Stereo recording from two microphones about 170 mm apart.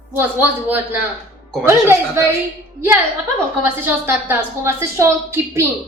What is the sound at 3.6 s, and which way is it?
A woman's voice, 10° right (ahead or behind).